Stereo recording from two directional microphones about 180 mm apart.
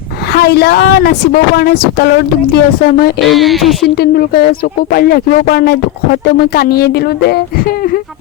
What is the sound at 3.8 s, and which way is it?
A woman's voice, 60° left (ahead or behind).